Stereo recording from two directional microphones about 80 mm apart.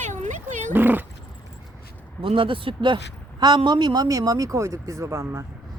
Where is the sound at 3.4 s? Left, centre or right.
Right.